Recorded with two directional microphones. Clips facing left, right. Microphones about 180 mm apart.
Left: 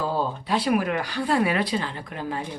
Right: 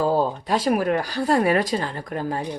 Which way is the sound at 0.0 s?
45° right (ahead or behind).